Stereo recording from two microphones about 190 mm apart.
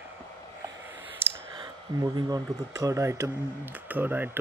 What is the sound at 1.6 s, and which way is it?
Speech, 20° right (ahead or behind).